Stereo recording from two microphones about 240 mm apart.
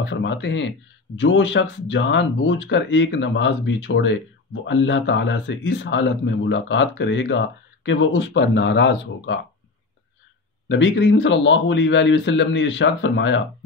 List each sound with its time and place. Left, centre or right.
0.0 s speech: left
10.7 s speech: left